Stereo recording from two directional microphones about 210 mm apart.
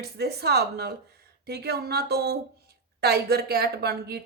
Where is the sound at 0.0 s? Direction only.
50° right (ahead or behind).